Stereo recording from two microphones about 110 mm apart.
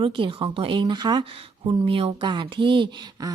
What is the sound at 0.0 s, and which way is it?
Speech, 50° right (ahead or behind).